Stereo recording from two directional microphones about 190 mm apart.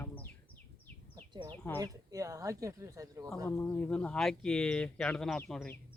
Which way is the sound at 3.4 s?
10° left (ahead or behind).